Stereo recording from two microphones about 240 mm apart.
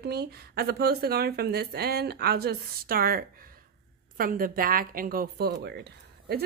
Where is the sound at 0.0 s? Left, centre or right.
Right.